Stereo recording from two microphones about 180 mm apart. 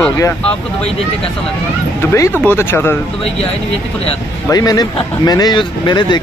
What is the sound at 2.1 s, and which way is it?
Speech, 15° left (ahead or behind).